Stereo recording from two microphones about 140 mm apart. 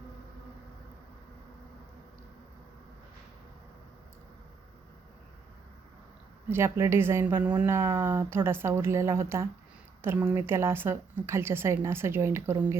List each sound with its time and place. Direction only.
6.5 s speech: 20° right (ahead or behind)